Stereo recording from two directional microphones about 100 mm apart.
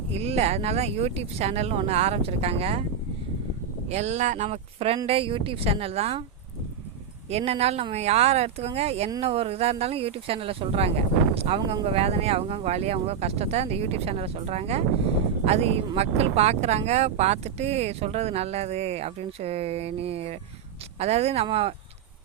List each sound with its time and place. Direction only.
0.1 s speech: 90° right
4.4 s speech: 85° right
5.0 s speech: 65° right (ahead or behind); by 6.2 s 90° right
7.3 s speech: 90° right
21.5 s speech: 75° right (ahead or behind)